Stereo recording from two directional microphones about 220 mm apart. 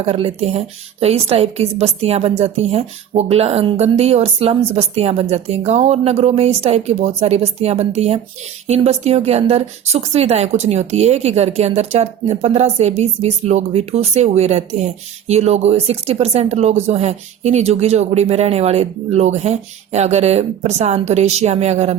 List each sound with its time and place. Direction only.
0.0 s a woman's voice: 25° right (ahead or behind)